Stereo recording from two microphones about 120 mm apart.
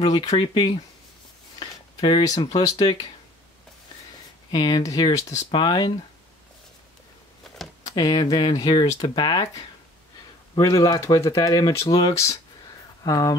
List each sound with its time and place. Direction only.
0.0 s speech: 35° left (ahead or behind)
2.0 s speech: 35° left (ahead or behind)
4.5 s speech: 35° left (ahead or behind)
7.9 s speech: 35° left (ahead or behind)